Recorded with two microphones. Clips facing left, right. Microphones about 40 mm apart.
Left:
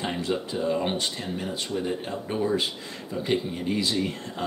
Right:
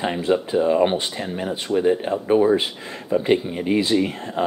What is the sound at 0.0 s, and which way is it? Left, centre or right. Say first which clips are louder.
Speech: right 7 dB; centre.